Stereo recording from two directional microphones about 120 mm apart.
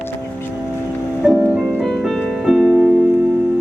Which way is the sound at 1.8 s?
5° left (ahead or behind).